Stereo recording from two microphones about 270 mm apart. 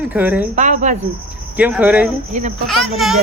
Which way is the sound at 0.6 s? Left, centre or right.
Right.